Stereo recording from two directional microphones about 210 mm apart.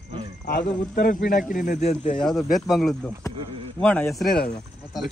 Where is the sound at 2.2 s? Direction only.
Centre (ahead or behind).